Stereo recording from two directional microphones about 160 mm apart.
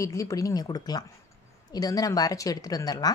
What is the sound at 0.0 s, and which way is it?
A woman's voice, 20° left (ahead or behind).